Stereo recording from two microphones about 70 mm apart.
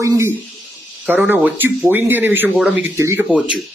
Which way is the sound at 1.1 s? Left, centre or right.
Right.